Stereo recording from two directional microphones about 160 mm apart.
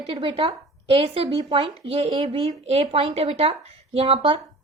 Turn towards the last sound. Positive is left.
turn(degrees=-35)  # may be behind; listen again after turning